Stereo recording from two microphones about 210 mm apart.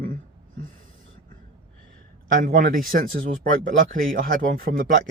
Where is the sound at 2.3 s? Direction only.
40° right (ahead or behind).